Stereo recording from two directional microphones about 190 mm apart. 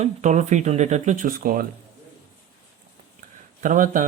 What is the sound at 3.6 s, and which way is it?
Speech, 45° right (ahead or behind).